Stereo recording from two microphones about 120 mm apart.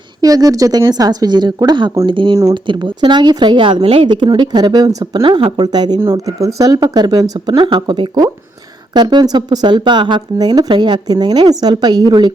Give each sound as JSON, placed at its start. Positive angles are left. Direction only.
{"t": 0.2, "sound": "speech", "side_deg": -30}
{"t": 5.2, "sound": "speech", "side_deg": -45}